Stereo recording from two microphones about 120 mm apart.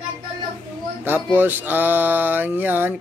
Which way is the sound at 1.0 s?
15° right (ahead or behind).